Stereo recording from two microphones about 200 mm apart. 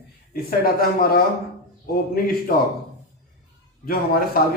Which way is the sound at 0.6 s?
45° left (ahead or behind).